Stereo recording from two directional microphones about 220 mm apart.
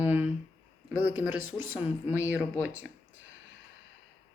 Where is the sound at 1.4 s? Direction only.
70° left (ahead or behind).